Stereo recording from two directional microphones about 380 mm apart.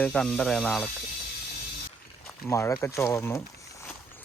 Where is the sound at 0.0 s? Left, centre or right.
Centre.